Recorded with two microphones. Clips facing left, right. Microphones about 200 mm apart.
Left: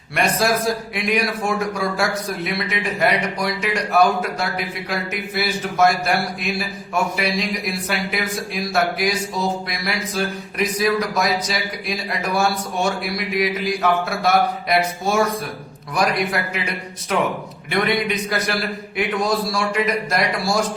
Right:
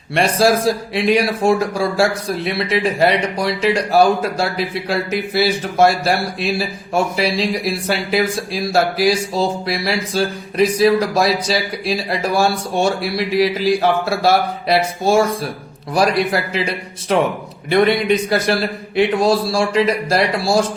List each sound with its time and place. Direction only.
0.1 s a man's voice: 30° right (ahead or behind)